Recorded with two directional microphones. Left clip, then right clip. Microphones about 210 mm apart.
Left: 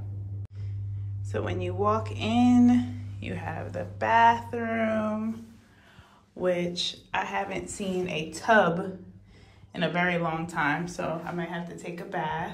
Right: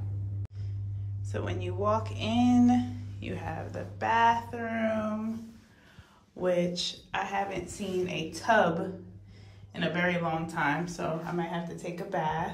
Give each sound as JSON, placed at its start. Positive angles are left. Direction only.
{"t": 1.3, "sound": "speech", "side_deg": -10}
{"t": 6.3, "sound": "speech", "side_deg": -15}